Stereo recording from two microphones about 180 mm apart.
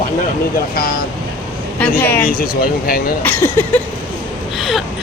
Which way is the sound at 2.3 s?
50° left (ahead or behind).